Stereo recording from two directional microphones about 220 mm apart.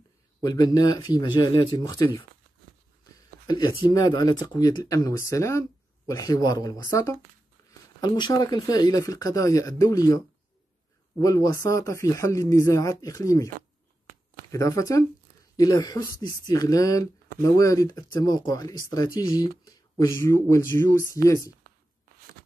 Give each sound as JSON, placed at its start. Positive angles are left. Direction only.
{"t": 0.4, "sound": "speech", "side_deg": 15}
{"t": 3.4, "sound": "speech", "side_deg": 20}
{"t": 13.6, "sound": "a sound", "side_deg": -40}
{"t": 14.5, "sound": "speech", "side_deg": 15}